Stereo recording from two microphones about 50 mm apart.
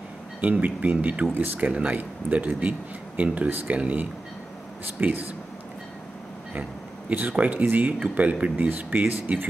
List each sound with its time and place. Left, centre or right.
0.4 s speech: right
7.2 s speech: right